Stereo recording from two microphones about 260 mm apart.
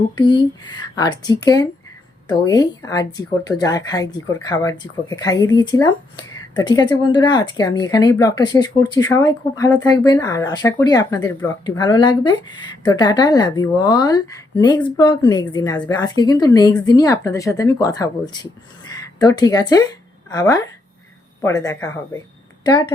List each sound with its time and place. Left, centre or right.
0.2 s a woman's voice: centre